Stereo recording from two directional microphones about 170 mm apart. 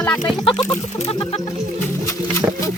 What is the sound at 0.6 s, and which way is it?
Chicken, 40° left (ahead or behind).